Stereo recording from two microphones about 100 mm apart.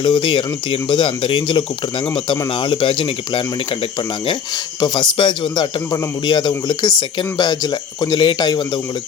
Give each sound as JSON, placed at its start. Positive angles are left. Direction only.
{"t": 0.0, "sound": "speech", "side_deg": 50}
{"t": 4.8, "sound": "speech", "side_deg": 50}